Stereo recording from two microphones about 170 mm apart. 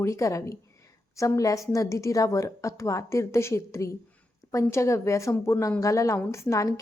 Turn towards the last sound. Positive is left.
turn(degrees=20)  # may be behind; listen again after turning